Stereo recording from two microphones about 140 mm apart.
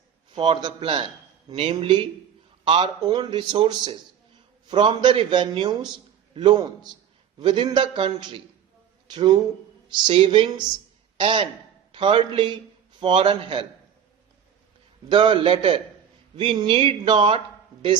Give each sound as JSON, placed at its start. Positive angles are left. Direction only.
{"t": 0.3, "sound": "a man's voice", "side_deg": -35}
{"t": 15.1, "sound": "speech", "side_deg": -35}